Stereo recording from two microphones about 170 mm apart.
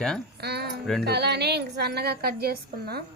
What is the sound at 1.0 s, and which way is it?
A woman's voice, 75° right (ahead or behind).